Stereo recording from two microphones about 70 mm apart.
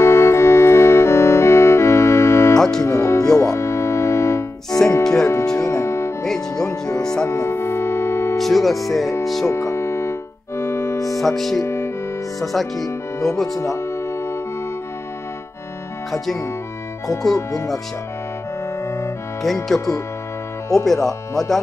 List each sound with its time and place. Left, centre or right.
0.0 s music: left
4.6 s music: centre
5.7 s music: left
6.2 s music: centre
7.2 s music: left
8.4 s music: centre
9.2 s speech: centre
9.5 s music: left
11.1 s speech: centre
11.6 s music: left
12.4 s speech: centre
13.6 s music: left
17.3 s speech: left
19.4 s speech: centre